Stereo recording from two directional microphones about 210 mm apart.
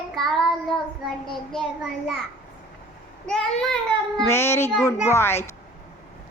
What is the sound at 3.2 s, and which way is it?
A child's voice, centre (ahead or behind).